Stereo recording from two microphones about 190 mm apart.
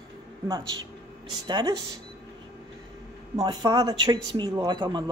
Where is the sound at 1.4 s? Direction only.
20° right (ahead or behind).